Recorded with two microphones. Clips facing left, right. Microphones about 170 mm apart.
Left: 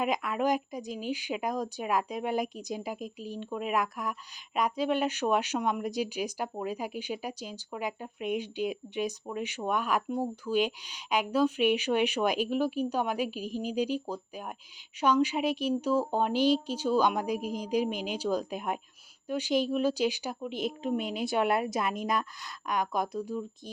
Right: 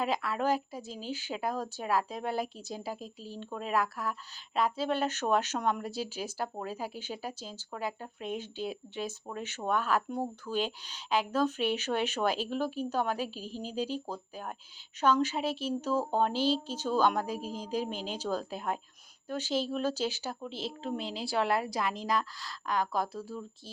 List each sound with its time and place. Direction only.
0.0 s a woman's voice: 15° left (ahead or behind)